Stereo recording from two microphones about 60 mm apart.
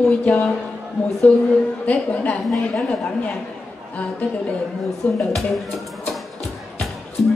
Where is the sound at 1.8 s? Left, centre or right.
Left.